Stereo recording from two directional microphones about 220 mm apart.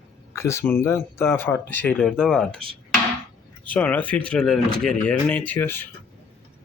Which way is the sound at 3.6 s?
5° left (ahead or behind).